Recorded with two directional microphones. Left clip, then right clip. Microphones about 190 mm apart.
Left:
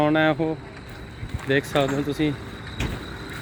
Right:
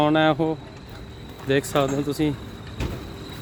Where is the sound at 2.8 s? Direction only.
55° left (ahead or behind).